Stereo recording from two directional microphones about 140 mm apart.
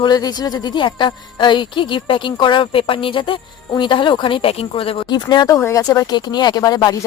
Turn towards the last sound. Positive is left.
turn(degrees=25)  # may be behind; listen again after turning